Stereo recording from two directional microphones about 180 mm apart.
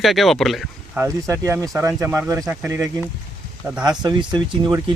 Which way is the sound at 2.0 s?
15° right (ahead or behind).